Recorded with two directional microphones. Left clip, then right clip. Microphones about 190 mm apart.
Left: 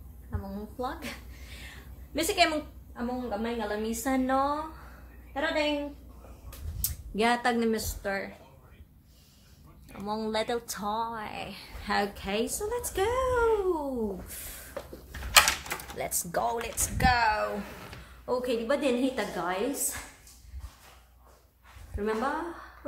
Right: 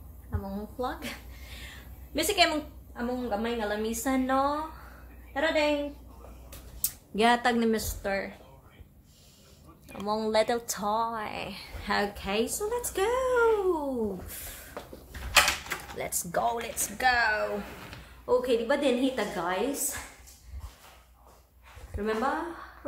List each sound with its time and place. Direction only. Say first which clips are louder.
0.3 s a woman's voice: right 2 dB; centre (ahead or behind)
6.8 s speech: right 2 dB; 10° right (ahead or behind)
9.8 s speech: right 3 dB; 25° right (ahead or behind)
11.9 s a woman's voice: even; centre (ahead or behind)
14.3 s a sound: right 1 dB; centre (ahead or behind)
16.0 s a woman's voice: right 1 dB; 5° left (ahead or behind)
21.9 s a woman's voice: right 1 dB; centre (ahead or behind)